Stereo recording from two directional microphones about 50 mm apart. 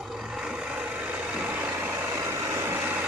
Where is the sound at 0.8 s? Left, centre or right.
Right.